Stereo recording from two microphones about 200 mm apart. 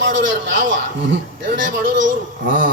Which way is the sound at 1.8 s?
40° right (ahead or behind).